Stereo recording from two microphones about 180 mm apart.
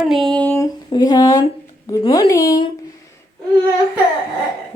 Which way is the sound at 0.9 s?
20° left (ahead or behind).